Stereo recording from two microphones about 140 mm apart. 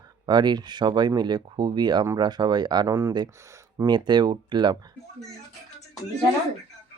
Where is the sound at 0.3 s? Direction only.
30° right (ahead or behind).